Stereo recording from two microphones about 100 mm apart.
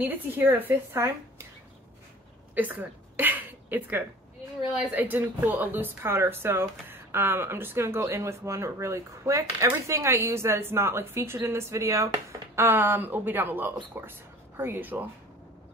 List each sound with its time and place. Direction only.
0.0 s speech: 20° right (ahead or behind)
2.5 s a sound: 15° right (ahead or behind)
4.9 s speech: 20° right (ahead or behind)